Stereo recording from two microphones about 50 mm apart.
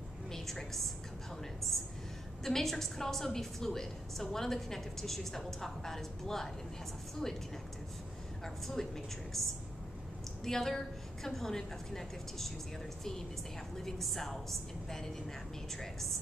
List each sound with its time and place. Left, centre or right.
0.3 s a woman's voice: centre
8.6 s a woman's voice: centre
13.7 s a woman's voice: centre